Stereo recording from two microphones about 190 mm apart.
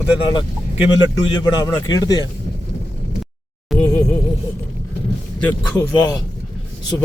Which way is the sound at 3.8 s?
15° left (ahead or behind).